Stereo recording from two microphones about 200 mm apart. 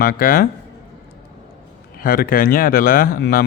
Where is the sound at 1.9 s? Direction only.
45° left (ahead or behind).